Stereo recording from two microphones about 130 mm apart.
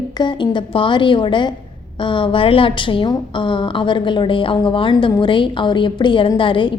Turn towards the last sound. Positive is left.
turn(degrees=40)  # may be behind; listen again after turning